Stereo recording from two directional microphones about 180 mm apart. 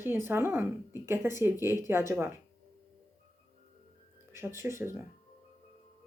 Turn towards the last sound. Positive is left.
turn(degrees=-15)  # may be behind; listen again after turning